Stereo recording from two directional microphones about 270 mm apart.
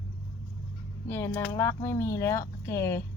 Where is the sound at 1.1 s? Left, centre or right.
Centre.